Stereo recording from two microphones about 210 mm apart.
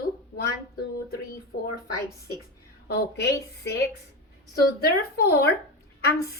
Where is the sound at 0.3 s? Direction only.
45° left (ahead or behind).